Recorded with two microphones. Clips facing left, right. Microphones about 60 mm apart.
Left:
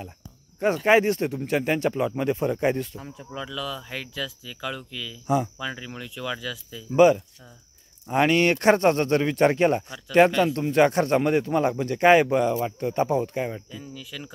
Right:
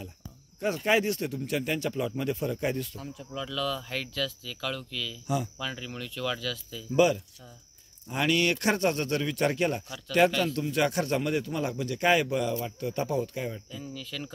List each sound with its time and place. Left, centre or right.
0.6 s speech: left
3.4 s speech: centre
5.2 s speech: left
5.6 s speech: centre
8.1 s speech: left
13.7 s speech: centre